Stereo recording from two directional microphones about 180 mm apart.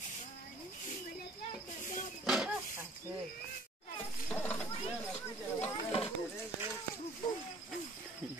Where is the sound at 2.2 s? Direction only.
Centre (ahead or behind).